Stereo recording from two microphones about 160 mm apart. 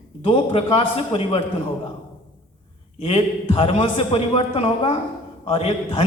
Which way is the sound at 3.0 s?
35° left (ahead or behind).